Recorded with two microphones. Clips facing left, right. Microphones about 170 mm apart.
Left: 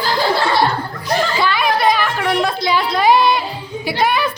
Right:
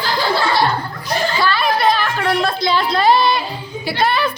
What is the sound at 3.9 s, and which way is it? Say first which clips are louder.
Speech: even; 15° left (ahead or behind).